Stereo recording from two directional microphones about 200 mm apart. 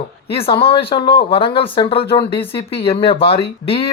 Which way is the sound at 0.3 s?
25° left (ahead or behind).